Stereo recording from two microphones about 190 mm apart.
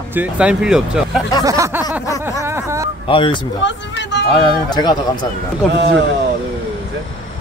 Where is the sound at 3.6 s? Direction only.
65° left (ahead or behind).